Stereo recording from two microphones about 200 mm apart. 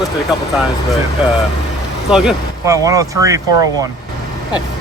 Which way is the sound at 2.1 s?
5° right (ahead or behind).